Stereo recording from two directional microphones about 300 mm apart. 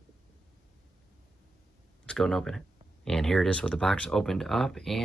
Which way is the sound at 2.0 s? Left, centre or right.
Centre.